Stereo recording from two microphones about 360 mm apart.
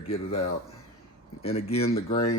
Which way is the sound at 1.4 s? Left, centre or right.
Centre.